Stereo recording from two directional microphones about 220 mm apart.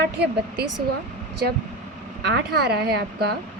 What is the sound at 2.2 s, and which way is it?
A woman's voice, 45° right (ahead or behind).